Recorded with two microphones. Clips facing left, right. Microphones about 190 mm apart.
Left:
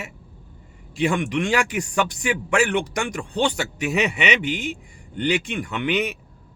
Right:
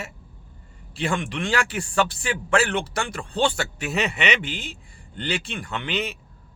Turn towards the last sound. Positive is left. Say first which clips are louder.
# left 5 dB
turn(degrees=15)  # may be behind; listen again after turning